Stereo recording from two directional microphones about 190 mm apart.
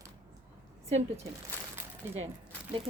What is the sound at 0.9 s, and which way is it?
Speech, 35° right (ahead or behind).